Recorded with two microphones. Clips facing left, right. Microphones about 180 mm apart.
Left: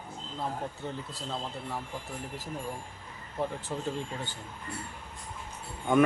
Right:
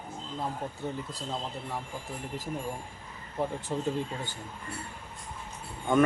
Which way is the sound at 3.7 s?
10° right (ahead or behind).